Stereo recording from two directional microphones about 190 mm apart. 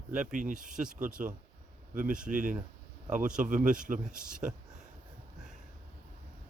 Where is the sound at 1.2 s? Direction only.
45° right (ahead or behind).